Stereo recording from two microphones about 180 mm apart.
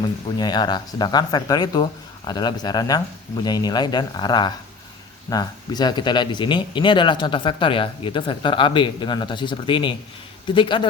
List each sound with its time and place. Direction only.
0.3 s speech: 25° left (ahead or behind)